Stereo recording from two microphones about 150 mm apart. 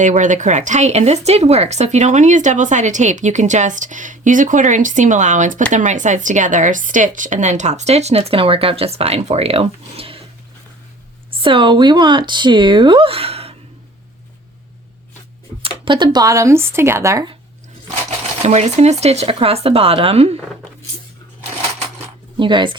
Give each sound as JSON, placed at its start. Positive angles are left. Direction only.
{"t": 0.0, "sound": "speech", "side_deg": -55}
{"t": 11.3, "sound": "speech", "side_deg": -35}
{"t": 15.6, "sound": "speech", "side_deg": -35}
{"t": 18.4, "sound": "speech", "side_deg": -45}
{"t": 22.4, "sound": "speech", "side_deg": -30}